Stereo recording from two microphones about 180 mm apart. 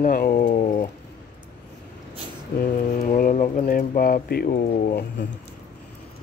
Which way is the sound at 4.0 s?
55° left (ahead or behind).